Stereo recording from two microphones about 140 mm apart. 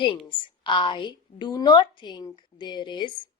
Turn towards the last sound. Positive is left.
turn(degrees=35)  # may be behind; listen again after turning